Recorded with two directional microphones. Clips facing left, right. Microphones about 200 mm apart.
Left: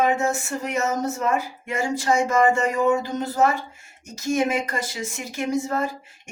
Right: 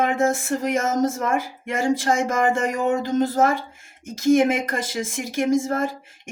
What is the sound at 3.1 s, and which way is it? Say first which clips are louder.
Speech: right 7 dB; 90° right.